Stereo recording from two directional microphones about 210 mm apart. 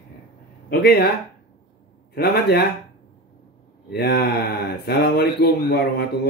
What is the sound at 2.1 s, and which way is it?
Speech, 50° left (ahead or behind).